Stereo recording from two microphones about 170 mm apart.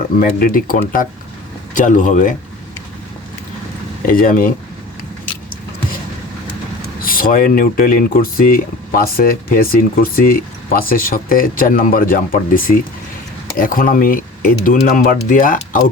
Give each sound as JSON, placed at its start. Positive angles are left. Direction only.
{"t": 0.2, "sound": "speech", "side_deg": 55}
{"t": 4.0, "sound": "speech", "side_deg": 55}
{"t": 7.0, "sound": "speech", "side_deg": 55}